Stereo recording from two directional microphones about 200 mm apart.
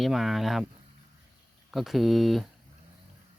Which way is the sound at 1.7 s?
Centre (ahead or behind).